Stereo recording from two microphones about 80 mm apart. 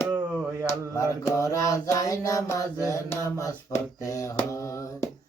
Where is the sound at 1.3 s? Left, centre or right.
Left.